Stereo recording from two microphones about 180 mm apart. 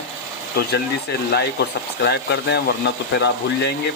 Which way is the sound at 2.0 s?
70° left (ahead or behind).